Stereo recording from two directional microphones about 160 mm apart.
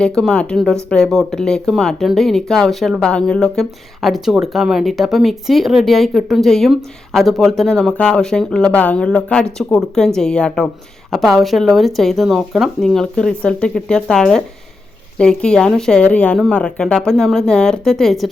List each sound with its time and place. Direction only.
0.2 s speech: 5° left (ahead or behind)